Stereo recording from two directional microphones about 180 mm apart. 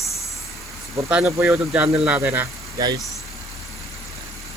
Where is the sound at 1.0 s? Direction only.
10° right (ahead or behind).